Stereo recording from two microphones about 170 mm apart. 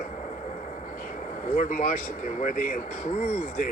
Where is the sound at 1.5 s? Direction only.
50° left (ahead or behind).